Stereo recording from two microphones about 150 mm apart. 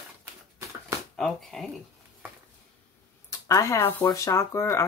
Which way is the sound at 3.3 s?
20° left (ahead or behind).